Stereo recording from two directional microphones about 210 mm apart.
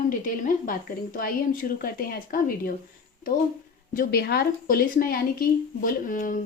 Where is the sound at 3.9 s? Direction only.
50° left (ahead or behind).